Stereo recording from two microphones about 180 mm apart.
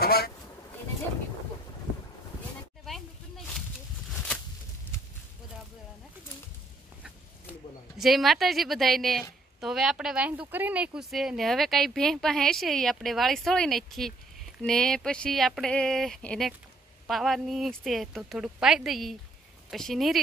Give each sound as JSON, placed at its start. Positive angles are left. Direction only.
{"t": 0.0, "sound": "honk", "side_deg": 60}
{"t": 8.0, "sound": "speech", "side_deg": 0}